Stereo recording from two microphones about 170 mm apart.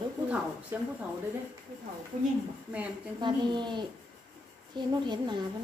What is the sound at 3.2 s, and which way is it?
A woman's voice, 25° right (ahead or behind).